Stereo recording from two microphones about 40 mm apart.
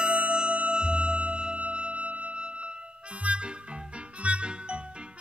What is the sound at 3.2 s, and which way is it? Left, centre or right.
Harmonica, right.